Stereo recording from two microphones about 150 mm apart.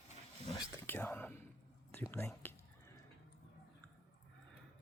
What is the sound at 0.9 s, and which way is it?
Speech, 15° left (ahead or behind).